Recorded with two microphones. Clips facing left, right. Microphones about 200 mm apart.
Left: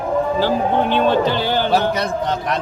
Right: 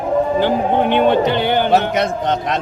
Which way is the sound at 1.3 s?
60° right (ahead or behind).